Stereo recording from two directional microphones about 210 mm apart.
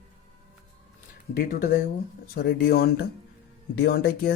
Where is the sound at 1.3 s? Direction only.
45° left (ahead or behind).